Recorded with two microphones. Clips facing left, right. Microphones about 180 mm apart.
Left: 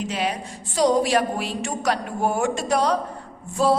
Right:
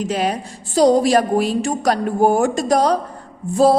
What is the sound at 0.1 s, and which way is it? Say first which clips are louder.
A woman's voice: right 5 dB; 45° right (ahead or behind).